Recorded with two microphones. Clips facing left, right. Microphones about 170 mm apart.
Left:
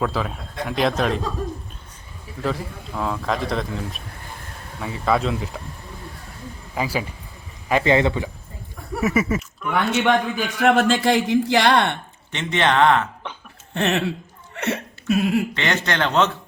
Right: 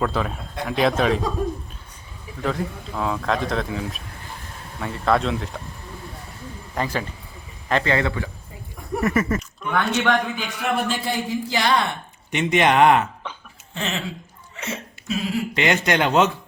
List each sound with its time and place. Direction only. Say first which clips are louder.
0.0 s a man's voice: even; centre (ahead or behind)
2.4 s a man's voice: right 1 dB; centre (ahead or behind)
6.7 s a man's voice: left 1 dB; 5° left (ahead or behind)
9.0 s speech: left 1 dB; 5° left (ahead or behind)
10.6 s speech: left 7 dB; 85° left; by 11.9 s 65° left (ahead or behind)
12.3 s speech: right 2 dB; 15° right (ahead or behind)
13.7 s speech: left 7 dB; 65° left (ahead or behind)
15.5 s speech: right 3 dB; 15° right (ahead or behind)